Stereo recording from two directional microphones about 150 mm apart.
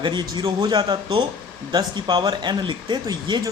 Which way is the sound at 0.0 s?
30° right (ahead or behind).